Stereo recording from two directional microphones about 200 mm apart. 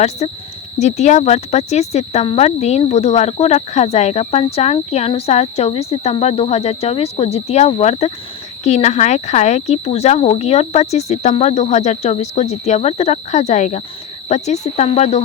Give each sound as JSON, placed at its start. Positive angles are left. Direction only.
{"t": 0.2, "sound": "speech", "side_deg": 35}